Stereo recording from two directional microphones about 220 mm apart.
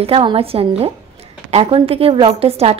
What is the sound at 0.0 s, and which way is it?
A woman's voice, 25° right (ahead or behind).